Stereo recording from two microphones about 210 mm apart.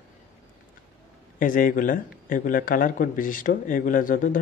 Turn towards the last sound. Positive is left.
turn(degrees=40)  # may be behind; listen again after turning